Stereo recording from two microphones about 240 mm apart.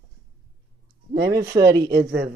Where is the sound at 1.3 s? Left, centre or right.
Centre.